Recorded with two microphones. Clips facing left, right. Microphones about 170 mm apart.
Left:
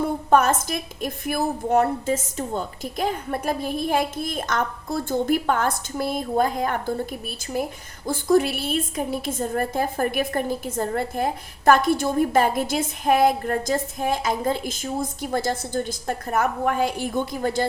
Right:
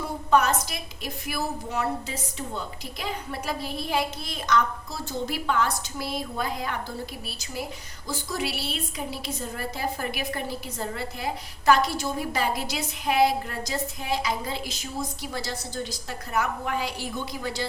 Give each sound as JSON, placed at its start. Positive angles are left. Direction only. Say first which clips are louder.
{"t": 0.0, "sound": "a woman's voice", "louder": "left 4 dB", "side_deg": 50}